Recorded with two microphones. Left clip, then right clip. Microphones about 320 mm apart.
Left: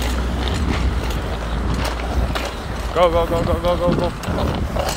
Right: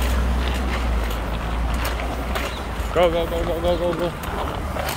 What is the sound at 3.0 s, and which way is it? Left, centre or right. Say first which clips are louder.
Speech: left 2 dB; centre.